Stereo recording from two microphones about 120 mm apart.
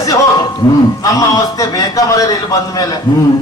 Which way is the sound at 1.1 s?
30° left (ahead or behind).